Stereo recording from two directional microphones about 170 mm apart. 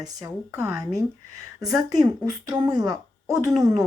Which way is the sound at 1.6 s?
20° right (ahead or behind).